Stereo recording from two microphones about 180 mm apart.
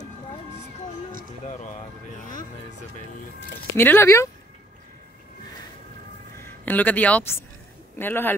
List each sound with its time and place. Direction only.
1.4 s speech: 40° left (ahead or behind)
3.7 s speech: 10° left (ahead or behind)
6.4 s speech: 10° left (ahead or behind)